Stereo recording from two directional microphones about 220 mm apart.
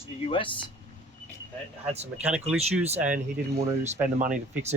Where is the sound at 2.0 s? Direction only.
5° right (ahead or behind).